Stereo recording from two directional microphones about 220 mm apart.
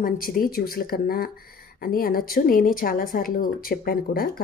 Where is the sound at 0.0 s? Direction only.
40° left (ahead or behind).